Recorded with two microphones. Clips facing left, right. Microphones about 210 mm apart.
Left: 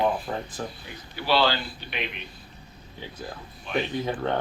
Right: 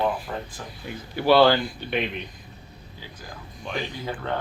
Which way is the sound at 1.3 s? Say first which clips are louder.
Right 7 dB; 55° right (ahead or behind).